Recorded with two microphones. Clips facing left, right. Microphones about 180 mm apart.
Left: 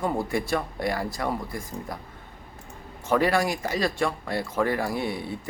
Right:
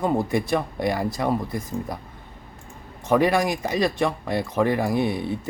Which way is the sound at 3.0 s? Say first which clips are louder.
Right 3 dB; 20° right (ahead or behind).